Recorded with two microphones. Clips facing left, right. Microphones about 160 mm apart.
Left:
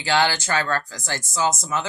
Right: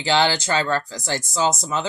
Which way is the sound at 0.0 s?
20° right (ahead or behind).